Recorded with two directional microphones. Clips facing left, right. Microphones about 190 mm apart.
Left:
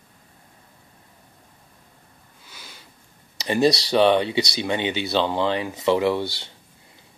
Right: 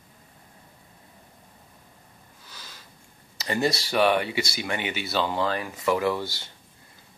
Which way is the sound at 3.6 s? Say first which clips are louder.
Left 8 dB; 75° left (ahead or behind).